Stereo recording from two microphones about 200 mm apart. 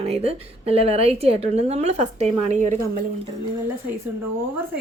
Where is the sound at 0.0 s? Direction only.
30° right (ahead or behind).